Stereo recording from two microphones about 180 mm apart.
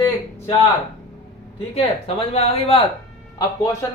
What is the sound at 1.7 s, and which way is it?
Speech, 35° left (ahead or behind).